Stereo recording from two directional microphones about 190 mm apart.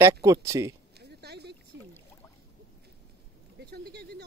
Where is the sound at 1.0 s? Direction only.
60° right (ahead or behind).